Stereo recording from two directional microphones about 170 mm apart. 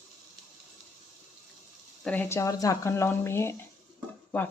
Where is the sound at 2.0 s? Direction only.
10° left (ahead or behind).